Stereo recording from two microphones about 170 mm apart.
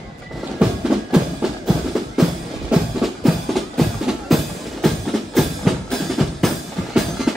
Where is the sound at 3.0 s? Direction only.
Centre (ahead or behind).